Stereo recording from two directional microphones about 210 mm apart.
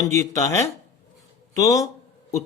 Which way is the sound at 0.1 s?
15° left (ahead or behind).